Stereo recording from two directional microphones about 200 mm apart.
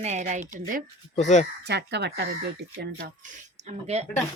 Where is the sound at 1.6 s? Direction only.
55° right (ahead or behind).